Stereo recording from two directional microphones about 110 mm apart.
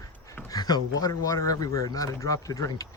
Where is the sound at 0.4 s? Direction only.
35° left (ahead or behind).